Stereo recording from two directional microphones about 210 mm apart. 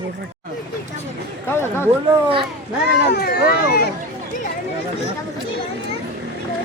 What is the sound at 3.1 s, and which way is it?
Speech, 50° left (ahead or behind).